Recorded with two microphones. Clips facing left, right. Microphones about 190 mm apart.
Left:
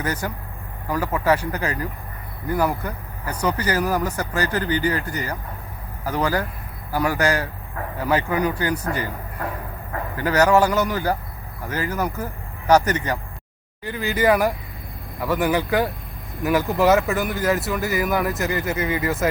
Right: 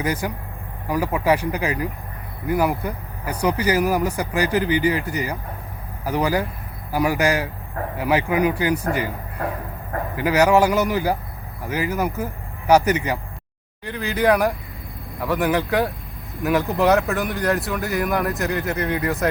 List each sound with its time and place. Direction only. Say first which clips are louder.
0.0 s speech: right 2 dB; 10° right (ahead or behind)
10.2 s speech: right 1 dB; 15° right (ahead or behind)
13.8 s speech: even; centre (ahead or behind)